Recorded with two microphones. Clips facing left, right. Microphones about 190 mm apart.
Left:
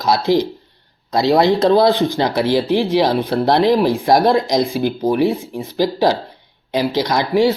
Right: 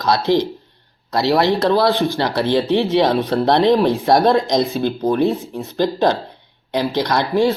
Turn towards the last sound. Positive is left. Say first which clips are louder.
# left 1 dB
turn(degrees=10)  # may be behind; listen again after turning